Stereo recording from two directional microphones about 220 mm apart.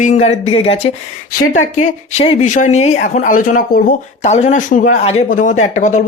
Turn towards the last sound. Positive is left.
turn(degrees=35)  # may be behind; listen again after turning